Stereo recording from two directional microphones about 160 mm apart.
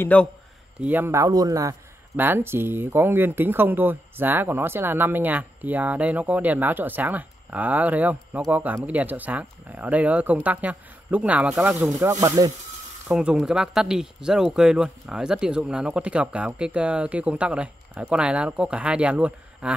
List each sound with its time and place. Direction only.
0.0 s a man's voice: 10° left (ahead or behind)
0.7 s a man's voice: 10° right (ahead or behind)
11.9 s speech: 20° right (ahead or behind)
13.1 s a man's voice: 5° right (ahead or behind)